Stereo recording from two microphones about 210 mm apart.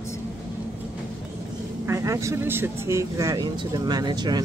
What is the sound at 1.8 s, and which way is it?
Speech, 15° right (ahead or behind).